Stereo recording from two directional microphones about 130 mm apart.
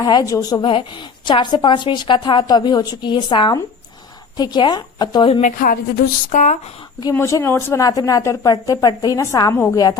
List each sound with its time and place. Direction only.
0.0 s a woman's voice: 30° left (ahead or behind)
0.6 s a woman's voice: 40° left (ahead or behind)
5.4 s a woman's voice: 90° left
6.3 s speech: 80° left
7.1 s a woman's voice: 20° left (ahead or behind)